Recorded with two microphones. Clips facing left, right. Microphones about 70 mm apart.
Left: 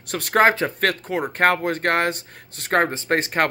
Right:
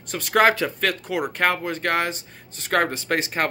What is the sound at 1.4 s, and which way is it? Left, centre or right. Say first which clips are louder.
Speech: left 6 dB; left.